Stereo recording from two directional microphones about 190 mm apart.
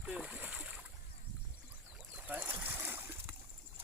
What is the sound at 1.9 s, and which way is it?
Boat, 5° right (ahead or behind).